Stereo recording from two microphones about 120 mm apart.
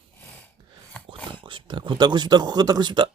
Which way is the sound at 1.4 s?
40° right (ahead or behind).